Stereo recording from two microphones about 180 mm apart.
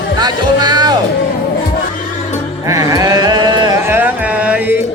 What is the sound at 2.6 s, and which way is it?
Sheep, 20° right (ahead or behind).